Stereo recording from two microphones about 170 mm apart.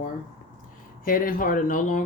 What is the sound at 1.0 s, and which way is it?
Speech, 55° left (ahead or behind).